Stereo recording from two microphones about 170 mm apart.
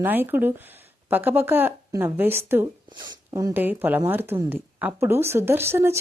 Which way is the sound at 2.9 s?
25° right (ahead or behind).